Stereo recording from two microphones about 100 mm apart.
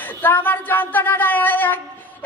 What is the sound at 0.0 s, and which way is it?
A woman's voice, 20° left (ahead or behind).